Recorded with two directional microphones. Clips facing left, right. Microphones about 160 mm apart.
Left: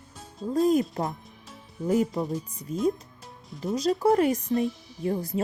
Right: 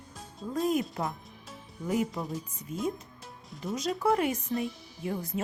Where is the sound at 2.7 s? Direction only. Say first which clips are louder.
Left 7 dB; 35° left (ahead or behind).